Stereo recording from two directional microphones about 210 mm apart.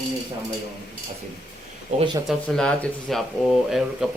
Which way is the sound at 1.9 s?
20° right (ahead or behind).